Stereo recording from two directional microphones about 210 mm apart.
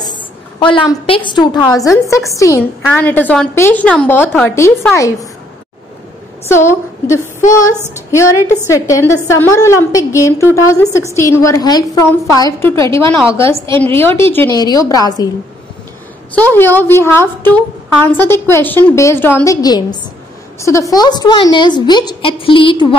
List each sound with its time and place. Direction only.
0.0 s a sound: 20° left (ahead or behind)
0.7 s a woman's voice: 25° left (ahead or behind)
6.5 s a woman's voice: 10° left (ahead or behind)
8.6 s a woman's voice: 15° left (ahead or behind)
16.3 s a woman's voice: 10° left (ahead or behind); by 22.9 s 25° left (ahead or behind)